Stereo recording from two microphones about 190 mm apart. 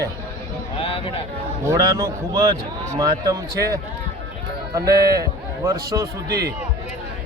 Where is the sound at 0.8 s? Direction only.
30° left (ahead or behind).